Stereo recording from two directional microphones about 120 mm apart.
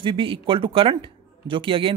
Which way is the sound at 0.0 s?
45° right (ahead or behind).